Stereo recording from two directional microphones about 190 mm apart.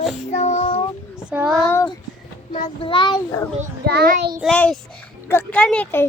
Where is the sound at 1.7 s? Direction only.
15° left (ahead or behind).